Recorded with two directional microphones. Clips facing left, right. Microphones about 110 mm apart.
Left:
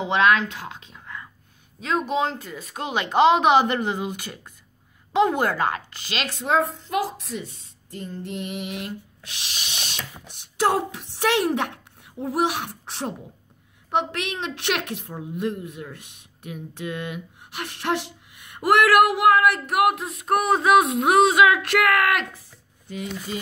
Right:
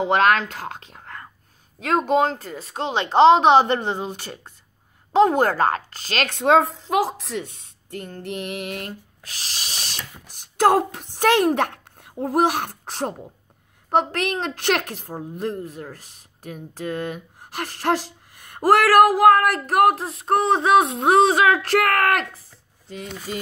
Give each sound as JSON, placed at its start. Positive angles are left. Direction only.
{"t": 0.0, "sound": "a woman's voice", "side_deg": -45}
{"t": 8.8, "sound": "a woman's voice", "side_deg": -40}